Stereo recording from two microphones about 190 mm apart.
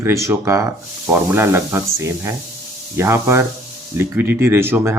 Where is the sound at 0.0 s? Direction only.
15° right (ahead or behind).